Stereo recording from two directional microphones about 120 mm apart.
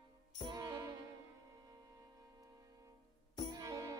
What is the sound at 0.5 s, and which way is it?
Music, 35° right (ahead or behind).